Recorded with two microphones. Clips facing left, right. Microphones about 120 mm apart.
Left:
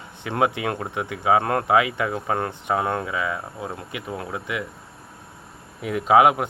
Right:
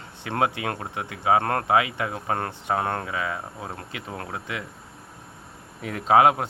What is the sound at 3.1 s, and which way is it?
Speech, 30° right (ahead or behind).